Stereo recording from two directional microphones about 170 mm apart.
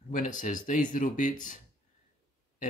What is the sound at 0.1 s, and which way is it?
Speech, 50° left (ahead or behind).